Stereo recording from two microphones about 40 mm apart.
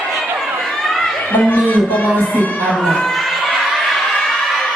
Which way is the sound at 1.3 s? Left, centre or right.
Left.